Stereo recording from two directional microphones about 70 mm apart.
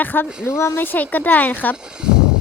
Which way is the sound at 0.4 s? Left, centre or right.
Left.